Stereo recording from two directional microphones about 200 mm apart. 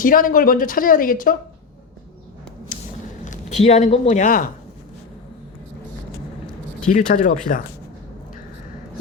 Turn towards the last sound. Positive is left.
turn(degrees=40)  # may be behind; listen again after turning